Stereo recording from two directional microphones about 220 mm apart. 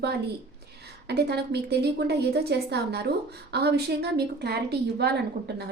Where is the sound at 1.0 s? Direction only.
50° right (ahead or behind).